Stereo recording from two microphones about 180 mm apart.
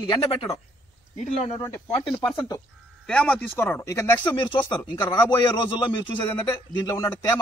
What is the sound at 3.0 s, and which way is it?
Speech, 5° left (ahead or behind).